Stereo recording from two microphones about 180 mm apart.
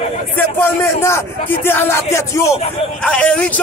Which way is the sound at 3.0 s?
5° left (ahead or behind).